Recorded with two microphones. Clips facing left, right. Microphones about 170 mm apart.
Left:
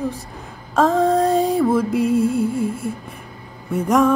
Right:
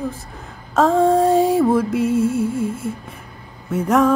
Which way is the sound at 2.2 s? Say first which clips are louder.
Even; 60° left (ahead or behind).